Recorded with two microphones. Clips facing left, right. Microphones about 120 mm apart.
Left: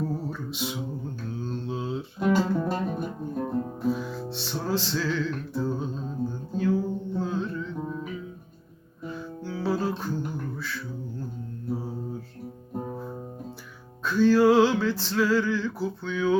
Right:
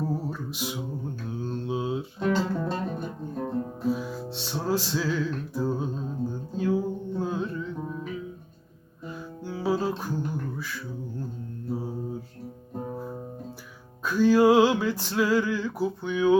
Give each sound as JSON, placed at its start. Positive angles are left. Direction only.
{"t": 0.0, "sound": "music", "side_deg": -5}
{"t": 1.5, "sound": "mantra", "side_deg": -10}
{"t": 2.1, "sound": "guitar", "side_deg": 5}
{"t": 4.6, "sound": "music", "side_deg": -10}
{"t": 9.0, "sound": "music", "side_deg": -10}
{"t": 12.7, "sound": "music", "side_deg": 0}